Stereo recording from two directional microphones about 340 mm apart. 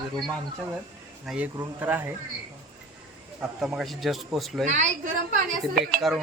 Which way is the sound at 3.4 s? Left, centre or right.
Centre.